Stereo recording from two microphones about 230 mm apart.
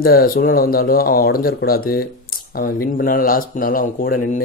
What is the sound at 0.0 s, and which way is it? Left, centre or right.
Speech, left.